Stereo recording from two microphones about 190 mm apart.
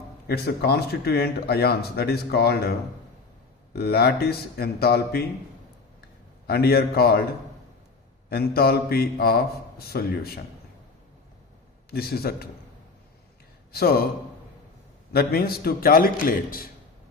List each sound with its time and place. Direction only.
0.3 s speech: 55° left (ahead or behind)
6.5 s speech: 55° left (ahead or behind)
8.3 s a man's voice: 55° left (ahead or behind)
11.9 s speech: 55° left (ahead or behind)
13.7 s a man's voice: 55° left (ahead or behind)
15.1 s a man's voice: 55° left (ahead or behind)